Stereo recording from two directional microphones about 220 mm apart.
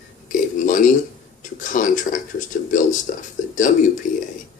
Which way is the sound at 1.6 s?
35° left (ahead or behind).